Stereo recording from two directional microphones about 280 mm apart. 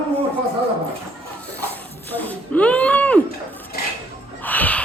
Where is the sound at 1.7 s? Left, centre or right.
Centre.